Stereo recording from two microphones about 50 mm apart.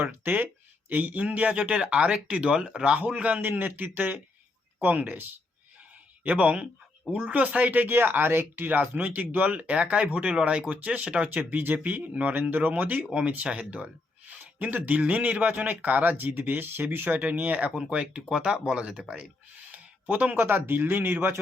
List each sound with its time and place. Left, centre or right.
0.0 s speech: right
3.6 s speech: right
6.2 s speech: right
11.5 s speech: right
14.3 s a sound: right
14.8 s speech: right
17.7 s speech: right
19.7 s a sound: right
20.3 s speech: right